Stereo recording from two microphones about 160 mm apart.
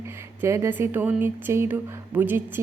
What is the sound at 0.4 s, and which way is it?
Speech, 15° right (ahead or behind).